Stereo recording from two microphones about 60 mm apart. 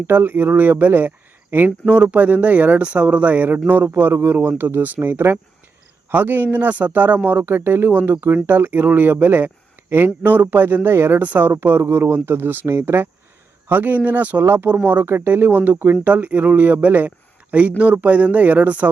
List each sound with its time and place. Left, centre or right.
0.1 s a man's voice: right
1.9 s a man's voice: right
11.2 s speech: right
11.4 s speech: right
13.7 s speech: right
14.4 s a man's voice: right
16.0 s speech: right